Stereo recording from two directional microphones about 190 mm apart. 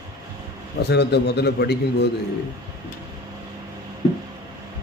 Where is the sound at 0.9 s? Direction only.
60° left (ahead or behind).